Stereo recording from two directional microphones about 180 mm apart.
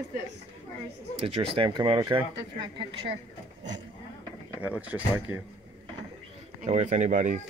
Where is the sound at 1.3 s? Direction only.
30° right (ahead or behind).